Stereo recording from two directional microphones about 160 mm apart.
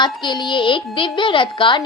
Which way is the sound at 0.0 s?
25° left (ahead or behind).